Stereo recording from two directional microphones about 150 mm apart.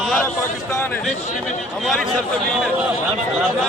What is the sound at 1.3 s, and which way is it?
Speech, 55° left (ahead or behind).